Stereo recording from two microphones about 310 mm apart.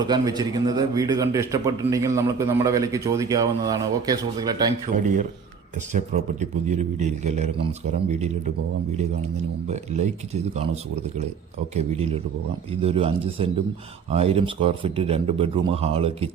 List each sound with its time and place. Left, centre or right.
0.0 s a man's voice: centre
6.4 s a man's voice: right
11.7 s a man's voice: centre